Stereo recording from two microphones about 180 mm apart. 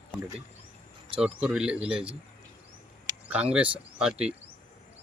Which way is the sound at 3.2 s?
5° right (ahead or behind).